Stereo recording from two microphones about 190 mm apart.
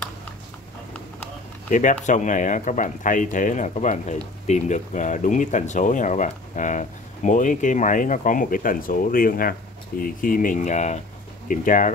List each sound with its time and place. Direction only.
1.7 s speech: 40° left (ahead or behind)